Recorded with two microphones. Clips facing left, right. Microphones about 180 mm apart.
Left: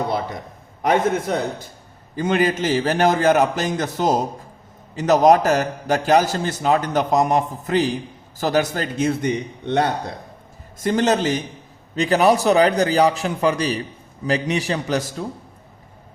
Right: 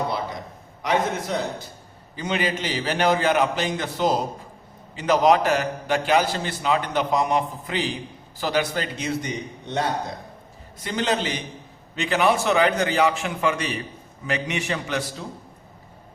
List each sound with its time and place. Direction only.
0.8 s a man's voice: 50° left (ahead or behind)
10.8 s a man's voice: 45° left (ahead or behind)